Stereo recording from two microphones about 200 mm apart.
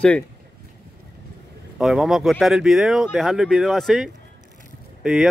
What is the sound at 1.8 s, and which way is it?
Speech, centre (ahead or behind).